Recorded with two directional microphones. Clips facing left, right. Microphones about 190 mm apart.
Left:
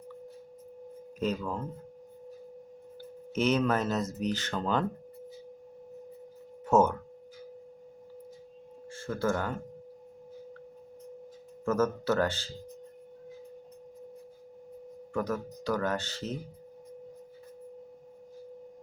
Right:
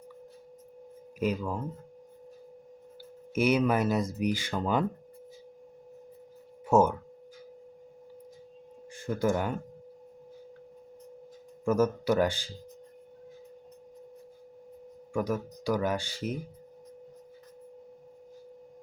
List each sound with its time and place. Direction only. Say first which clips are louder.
1.2 s speech: right 1 dB; 10° right (ahead or behind)
3.3 s speech: right 2 dB; 10° right (ahead or behind)
6.7 s speech: right 1 dB; 10° right (ahead or behind)
8.9 s speech: right 2 dB; 15° right (ahead or behind)
11.6 s speech: right 2 dB; 15° right (ahead or behind)
15.1 s speech: right 2 dB; 10° right (ahead or behind)